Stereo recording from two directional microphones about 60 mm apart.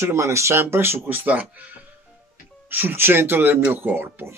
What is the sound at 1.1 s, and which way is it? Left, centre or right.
Speech, right.